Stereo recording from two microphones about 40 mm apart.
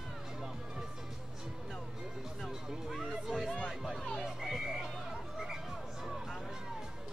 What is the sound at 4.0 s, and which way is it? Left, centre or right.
Croak, centre.